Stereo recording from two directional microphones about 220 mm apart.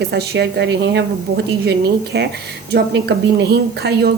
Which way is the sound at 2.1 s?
45° right (ahead or behind).